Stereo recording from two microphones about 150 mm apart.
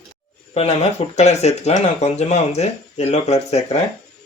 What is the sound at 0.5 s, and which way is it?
Speech, 45° left (ahead or behind).